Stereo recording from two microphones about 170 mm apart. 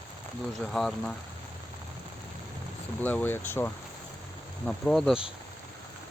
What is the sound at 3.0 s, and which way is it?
Speech, 10° left (ahead or behind).